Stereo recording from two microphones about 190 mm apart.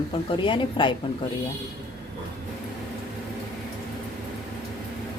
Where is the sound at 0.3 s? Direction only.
25° left (ahead or behind).